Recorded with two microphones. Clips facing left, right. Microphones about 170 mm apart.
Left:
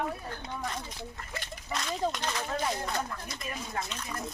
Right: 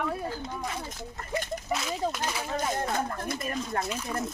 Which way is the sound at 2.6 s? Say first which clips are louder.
Right 3 dB; 50° right (ahead or behind).